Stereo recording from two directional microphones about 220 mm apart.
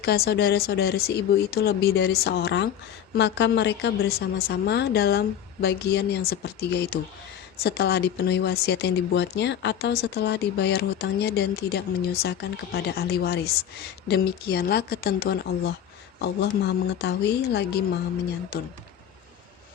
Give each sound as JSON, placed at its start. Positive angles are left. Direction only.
{"t": 0.0, "sound": "speech", "side_deg": 45}